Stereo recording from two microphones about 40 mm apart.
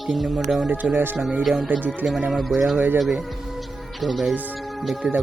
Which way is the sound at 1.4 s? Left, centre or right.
Centre.